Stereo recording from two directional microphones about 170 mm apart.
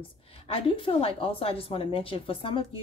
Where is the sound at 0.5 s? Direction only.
30° left (ahead or behind).